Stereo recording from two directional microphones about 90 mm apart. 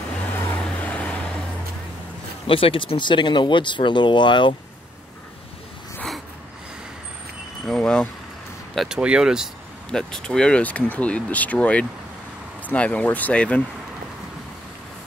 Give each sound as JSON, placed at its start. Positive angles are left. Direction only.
{"t": 0.6, "sound": "vehicle", "side_deg": 15}
{"t": 2.4, "sound": "speech", "side_deg": 85}
{"t": 7.6, "sound": "speech", "side_deg": 10}
{"t": 8.7, "sound": "speech", "side_deg": -5}
{"t": 9.8, "sound": "speech", "side_deg": 10}